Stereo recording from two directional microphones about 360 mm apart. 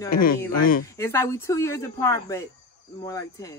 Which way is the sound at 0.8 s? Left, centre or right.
Centre.